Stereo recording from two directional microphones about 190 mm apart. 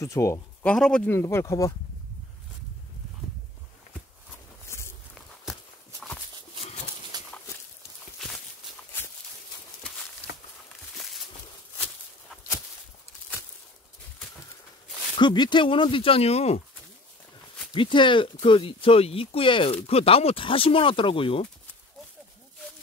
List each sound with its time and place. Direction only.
0.0 s speech: 15° left (ahead or behind)
4.6 s walk: 15° left (ahead or behind)
7.1 s horse: 20° right (ahead or behind)
11.0 s a sound: centre (ahead or behind)
15.1 s speech: 25° left (ahead or behind)
17.7 s speech: 25° left (ahead or behind)